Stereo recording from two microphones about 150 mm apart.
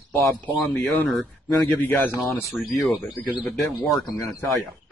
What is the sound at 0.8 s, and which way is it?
Speech, centre (ahead or behind).